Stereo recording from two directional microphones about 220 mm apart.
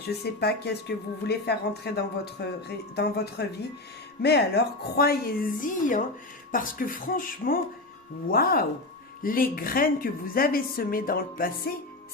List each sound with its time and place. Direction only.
0.1 s a woman's voice: 45° left (ahead or behind)